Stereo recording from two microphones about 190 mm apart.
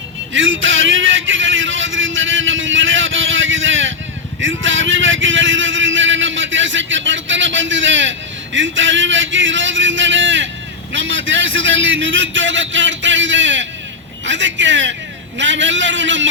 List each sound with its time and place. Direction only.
0.3 s a man's voice: 90° right; by 16.3 s 75° right (ahead or behind)